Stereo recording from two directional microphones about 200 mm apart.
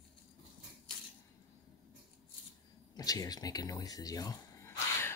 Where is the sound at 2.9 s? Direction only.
20° left (ahead or behind).